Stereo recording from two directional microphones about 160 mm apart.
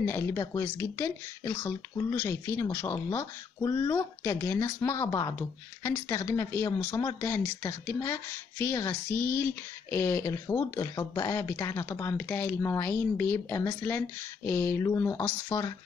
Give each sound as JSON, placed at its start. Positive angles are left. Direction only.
{"t": 0.0, "sound": "speech", "side_deg": 15}